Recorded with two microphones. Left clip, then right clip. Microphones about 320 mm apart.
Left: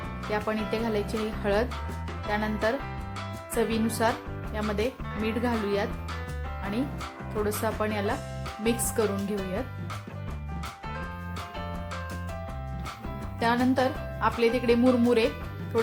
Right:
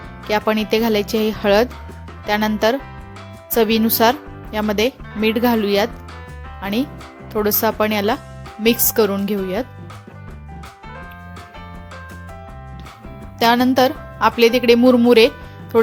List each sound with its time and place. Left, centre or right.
0.3 s speech: right
13.4 s speech: right